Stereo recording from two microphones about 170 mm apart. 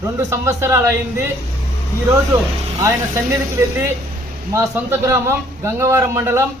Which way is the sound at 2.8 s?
15° right (ahead or behind).